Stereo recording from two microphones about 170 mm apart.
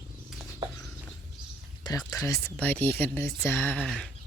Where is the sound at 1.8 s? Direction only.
20° left (ahead or behind); by 4.1 s centre (ahead or behind).